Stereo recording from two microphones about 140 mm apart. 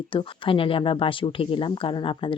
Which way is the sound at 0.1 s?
40° left (ahead or behind).